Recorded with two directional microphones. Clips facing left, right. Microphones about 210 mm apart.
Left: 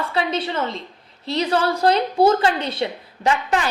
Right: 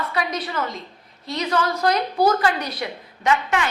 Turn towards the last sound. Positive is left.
turn(degrees=35)  # may be behind; listen again after turning